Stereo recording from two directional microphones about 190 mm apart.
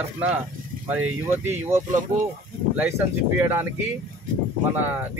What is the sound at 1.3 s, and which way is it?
Speech, 10° right (ahead or behind).